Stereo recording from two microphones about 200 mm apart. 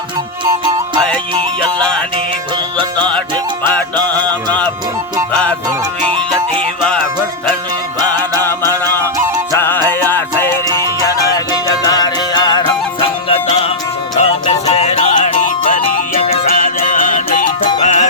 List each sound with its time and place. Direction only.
1.8 s music: 5° left (ahead or behind)
3.9 s music: 20° right (ahead or behind)
6.6 s music: 5° left (ahead or behind)
9.5 s music: 10° left (ahead or behind); by 18.1 s 35° left (ahead or behind)